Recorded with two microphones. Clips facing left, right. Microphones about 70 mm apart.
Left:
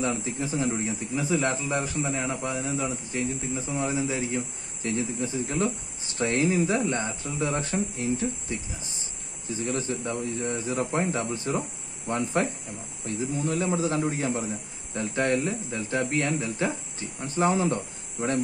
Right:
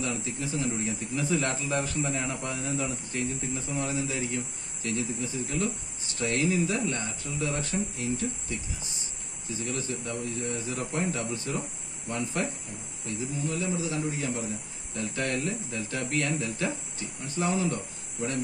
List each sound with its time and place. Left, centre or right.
0.0 s speech: left
0.8 s speech: centre
3.7 s a man's voice: left
14.1 s speech: left